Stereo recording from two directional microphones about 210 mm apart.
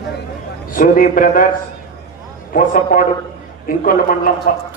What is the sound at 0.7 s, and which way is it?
Speech, 40° left (ahead or behind).